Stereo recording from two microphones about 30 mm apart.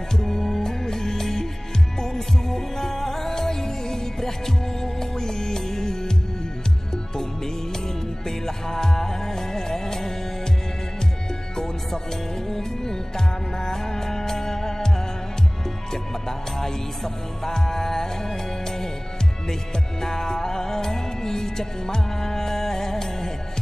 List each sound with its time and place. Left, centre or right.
0.1 s music: centre
8.3 s music: centre
11.5 s music: left
20.0 s music: centre